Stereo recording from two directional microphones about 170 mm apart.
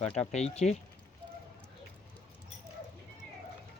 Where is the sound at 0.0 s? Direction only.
40° left (ahead or behind).